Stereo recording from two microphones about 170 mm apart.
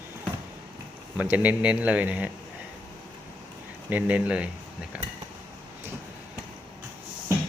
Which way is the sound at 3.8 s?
10° right (ahead or behind).